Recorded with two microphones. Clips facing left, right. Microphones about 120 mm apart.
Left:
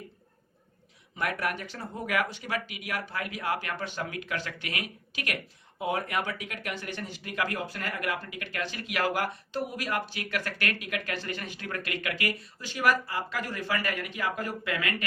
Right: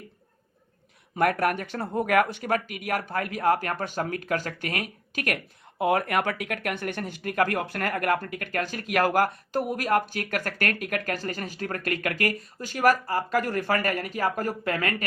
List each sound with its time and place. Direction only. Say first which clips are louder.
1.1 s speech: right 8 dB; 50° right (ahead or behind)
5.8 s speech: right 6 dB; 65° right (ahead or behind); by 15.0 s 45° right (ahead or behind)